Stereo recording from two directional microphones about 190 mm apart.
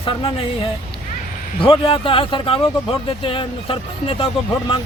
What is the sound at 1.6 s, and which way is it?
Speech, 30° left (ahead or behind).